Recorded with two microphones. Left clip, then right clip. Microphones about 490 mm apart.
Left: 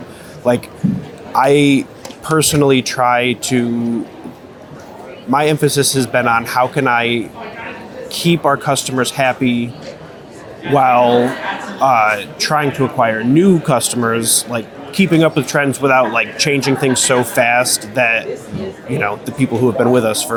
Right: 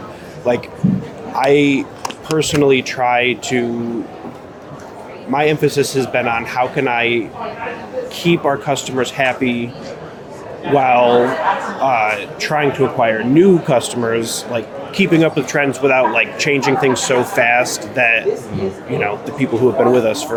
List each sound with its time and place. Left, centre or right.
0.4 s speech: left
5.3 s speech: left
10.8 s speech: left